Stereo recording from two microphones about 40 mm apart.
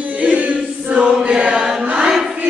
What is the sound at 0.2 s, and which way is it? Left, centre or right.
Choir, right.